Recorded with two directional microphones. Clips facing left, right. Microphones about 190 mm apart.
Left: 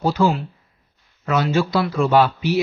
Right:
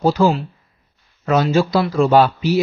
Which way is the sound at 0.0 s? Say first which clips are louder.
Right 3 dB; 40° right (ahead or behind).